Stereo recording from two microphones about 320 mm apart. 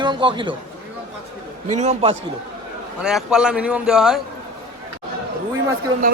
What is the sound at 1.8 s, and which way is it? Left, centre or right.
Speech, centre.